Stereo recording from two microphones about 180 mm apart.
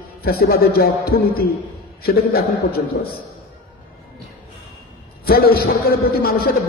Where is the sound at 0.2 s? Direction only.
60° left (ahead or behind).